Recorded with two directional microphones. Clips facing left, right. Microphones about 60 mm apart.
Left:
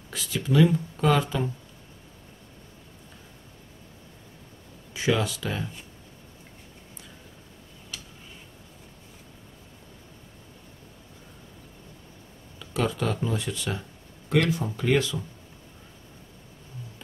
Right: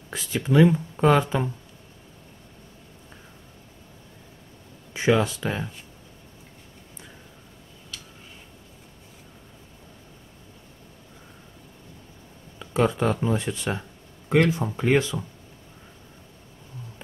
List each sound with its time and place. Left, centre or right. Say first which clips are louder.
0.1 s speech: right 3 dB; right
4.9 s speech: right 4 dB; right
12.5 s speech: right 5 dB; right